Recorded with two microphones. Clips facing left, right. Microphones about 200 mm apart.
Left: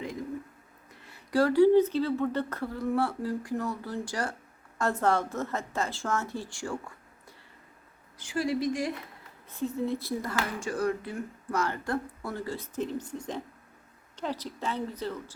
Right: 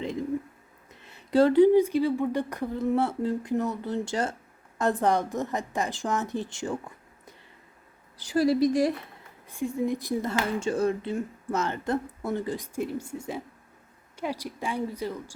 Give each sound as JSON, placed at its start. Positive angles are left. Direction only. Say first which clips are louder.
{"t": 1.0, "sound": "speech", "louder": "right 4 dB", "side_deg": -20}
{"t": 8.2, "sound": "a woman's voice", "louder": "right 6 dB", "side_deg": -35}
{"t": 9.5, "sound": "speech", "louder": "right 2 dB", "side_deg": -10}